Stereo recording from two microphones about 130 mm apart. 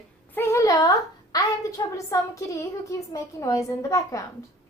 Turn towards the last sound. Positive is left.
turn(degrees=25)  # may be behind; listen again after turning